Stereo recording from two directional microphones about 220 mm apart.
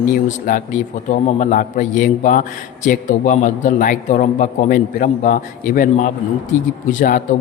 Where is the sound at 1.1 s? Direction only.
35° left (ahead or behind).